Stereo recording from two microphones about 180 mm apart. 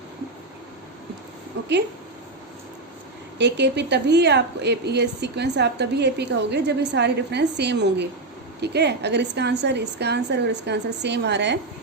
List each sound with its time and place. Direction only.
3.3 s a woman's voice: 75° right (ahead or behind)